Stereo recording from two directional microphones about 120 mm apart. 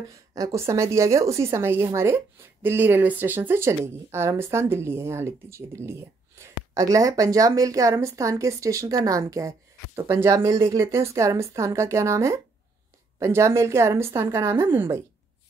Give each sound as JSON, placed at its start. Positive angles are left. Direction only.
{"t": 0.1, "sound": "speech", "side_deg": -30}